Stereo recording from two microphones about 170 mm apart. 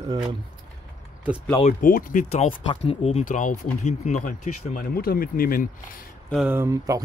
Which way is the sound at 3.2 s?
50° left (ahead or behind).